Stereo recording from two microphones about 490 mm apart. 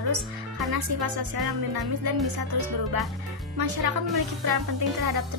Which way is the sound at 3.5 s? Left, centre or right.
Right.